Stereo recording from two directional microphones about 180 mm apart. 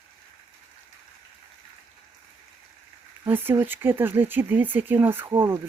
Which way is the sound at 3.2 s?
10° right (ahead or behind).